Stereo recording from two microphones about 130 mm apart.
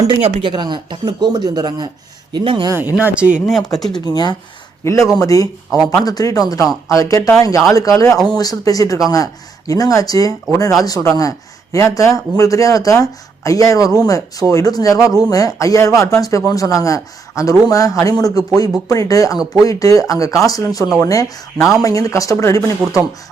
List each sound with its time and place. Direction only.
0.2 s speech: 50° right (ahead or behind)
0.5 s speech: 35° right (ahead or behind)
2.6 s speech: 20° right (ahead or behind)
3.8 s speech: 5° left (ahead or behind)
4.1 s speech: 30° left (ahead or behind)
5.7 s speech: centre (ahead or behind)
6.1 s speech: 30° left (ahead or behind)